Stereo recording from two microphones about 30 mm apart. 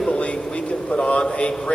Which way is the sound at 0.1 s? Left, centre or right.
Left.